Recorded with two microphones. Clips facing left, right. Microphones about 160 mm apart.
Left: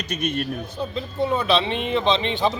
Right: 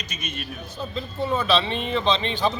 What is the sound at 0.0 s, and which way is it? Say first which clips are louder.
Speech: left 9 dB; 60° left (ahead or behind).